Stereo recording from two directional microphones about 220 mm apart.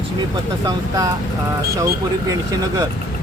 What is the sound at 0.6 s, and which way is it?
Speech, 15° right (ahead or behind).